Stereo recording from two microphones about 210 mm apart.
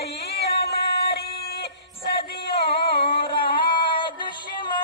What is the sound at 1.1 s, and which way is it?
Music, 45° left (ahead or behind).